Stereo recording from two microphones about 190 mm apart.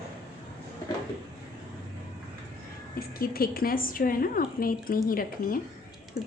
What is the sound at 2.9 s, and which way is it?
A woman's voice, 50° left (ahead or behind).